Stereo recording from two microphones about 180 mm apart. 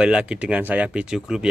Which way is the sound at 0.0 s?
5° right (ahead or behind).